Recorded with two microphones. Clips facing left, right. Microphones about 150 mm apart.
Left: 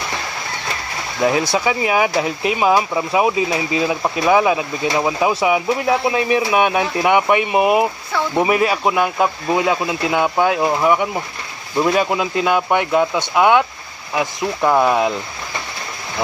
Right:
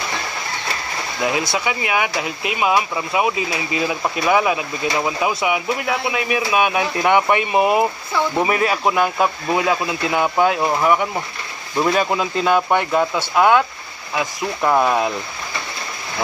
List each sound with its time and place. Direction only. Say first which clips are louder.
1.2 s speech: left 5 dB; 35° left (ahead or behind)
5.3 s speech: left 4 dB; 30° left (ahead or behind)
7.0 s speech: left 1 dB; 10° left (ahead or behind)
9.2 s speech: left 1 dB; 20° left (ahead or behind)
11.7 s speech: left 2 dB; 5° left (ahead or behind)
14.6 s speech: left 2 dB; 5° left (ahead or behind)